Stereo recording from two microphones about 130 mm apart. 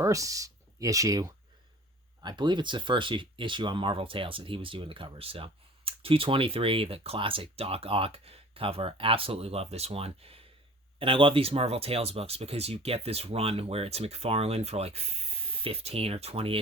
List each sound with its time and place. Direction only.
0.0 s speech: 25° right (ahead or behind); by 16.6 s 50° right (ahead or behind)